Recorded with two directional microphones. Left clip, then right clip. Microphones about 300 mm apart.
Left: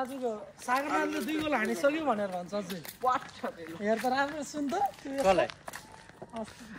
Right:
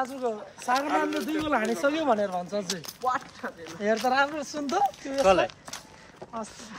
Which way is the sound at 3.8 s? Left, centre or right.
Right.